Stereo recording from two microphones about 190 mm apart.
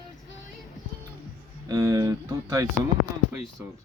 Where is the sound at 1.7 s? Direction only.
20° right (ahead or behind).